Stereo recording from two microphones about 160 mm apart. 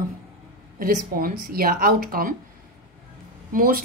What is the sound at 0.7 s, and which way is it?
Speech, 60° right (ahead or behind).